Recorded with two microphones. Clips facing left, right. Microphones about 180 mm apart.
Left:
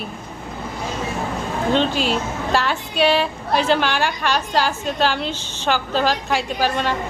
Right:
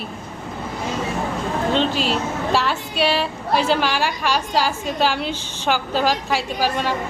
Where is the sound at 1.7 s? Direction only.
Centre (ahead or behind).